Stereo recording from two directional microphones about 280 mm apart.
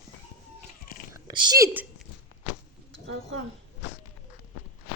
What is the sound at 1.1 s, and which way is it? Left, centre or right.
Speech, centre.